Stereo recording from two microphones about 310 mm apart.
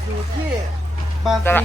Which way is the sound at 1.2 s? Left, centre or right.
Centre.